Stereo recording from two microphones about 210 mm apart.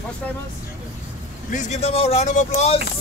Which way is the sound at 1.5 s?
30° left (ahead or behind).